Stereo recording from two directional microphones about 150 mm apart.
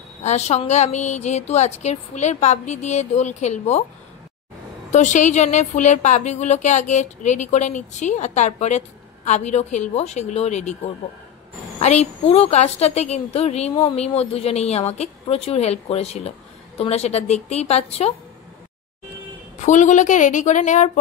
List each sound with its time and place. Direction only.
0.2 s a woman's voice: 45° left (ahead or behind)
4.9 s a woman's voice: 55° left (ahead or behind)
11.8 s a woman's voice: 45° left (ahead or behind)
19.6 s a woman's voice: 55° left (ahead or behind)